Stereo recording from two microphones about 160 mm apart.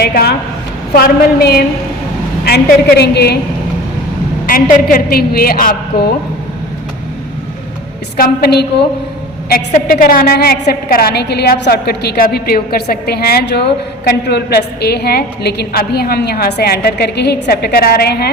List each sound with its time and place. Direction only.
0.0 s a woman's voice: 75° left (ahead or behind)
4.7 s a woman's voice: 60° left (ahead or behind)
8.1 s a woman's voice: 85° left
9.5 s a woman's voice: 70° left (ahead or behind)